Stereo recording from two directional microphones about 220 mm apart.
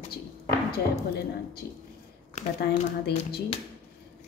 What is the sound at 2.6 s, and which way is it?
Speech, 45° left (ahead or behind).